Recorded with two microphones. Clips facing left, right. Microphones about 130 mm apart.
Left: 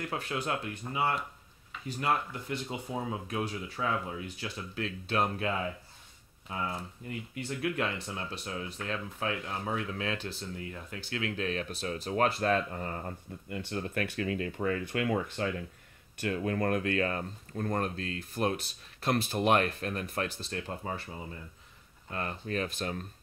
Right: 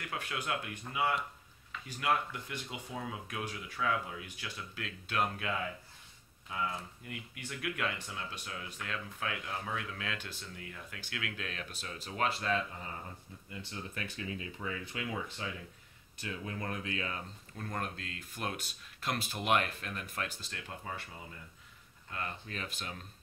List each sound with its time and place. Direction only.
0.0 s speech: 30° left (ahead or behind)
7.1 s speech: 30° left (ahead or behind)
22.1 s speech: 40° left (ahead or behind)